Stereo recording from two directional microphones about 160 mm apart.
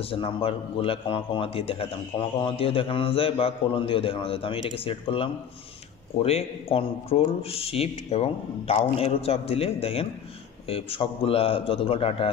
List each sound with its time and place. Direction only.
0.0 s a man's voice: 35° left (ahead or behind)